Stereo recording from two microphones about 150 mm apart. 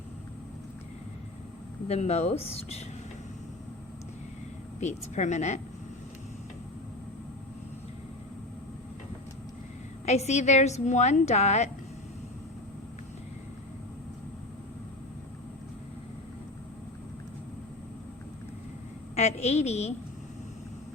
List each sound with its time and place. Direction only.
1.9 s a woman's voice: 45° left (ahead or behind)
4.8 s a woman's voice: 50° left (ahead or behind)
10.1 s a woman's voice: 45° left (ahead or behind)
19.1 s a woman's voice: 45° left (ahead or behind)